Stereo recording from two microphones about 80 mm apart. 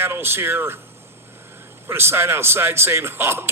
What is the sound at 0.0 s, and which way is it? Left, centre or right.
Speech, right.